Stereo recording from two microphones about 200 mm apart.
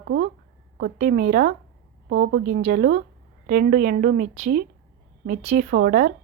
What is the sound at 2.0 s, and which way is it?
Speech, 55° right (ahead or behind).